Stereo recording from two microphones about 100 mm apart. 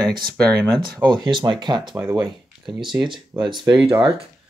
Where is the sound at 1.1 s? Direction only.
50° right (ahead or behind).